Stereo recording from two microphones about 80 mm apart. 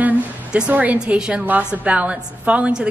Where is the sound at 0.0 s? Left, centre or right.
Centre.